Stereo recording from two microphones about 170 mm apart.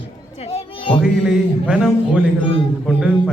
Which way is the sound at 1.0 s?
5° right (ahead or behind).